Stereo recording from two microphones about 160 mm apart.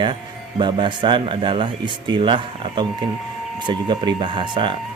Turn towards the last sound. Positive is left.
turn(degrees=-30)  # may be behind; listen again after turning